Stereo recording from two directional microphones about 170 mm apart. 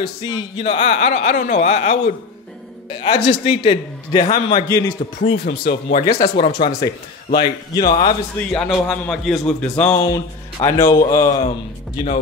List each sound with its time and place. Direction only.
0.0 s a man's voice: 25° left (ahead or behind)
2.9 s a man's voice: 30° left (ahead or behind)
5.4 s speech: 65° left (ahead or behind)
6.0 s a man's voice: 20° left (ahead or behind)
8.4 s a man's voice: 5° left (ahead or behind)
9.9 s a man's voice: 20° left (ahead or behind)